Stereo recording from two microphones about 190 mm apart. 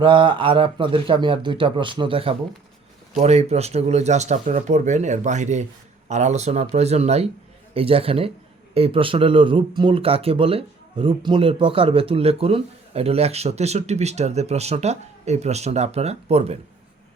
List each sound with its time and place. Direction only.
0.0 s speech: 25° right (ahead or behind)